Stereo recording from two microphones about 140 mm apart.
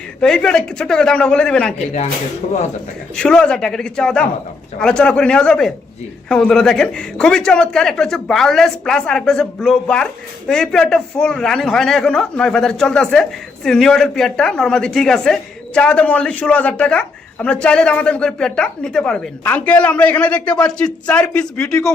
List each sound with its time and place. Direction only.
0.2 s a man's voice: 5° left (ahead or behind)
3.2 s a man's voice: 5° left (ahead or behind)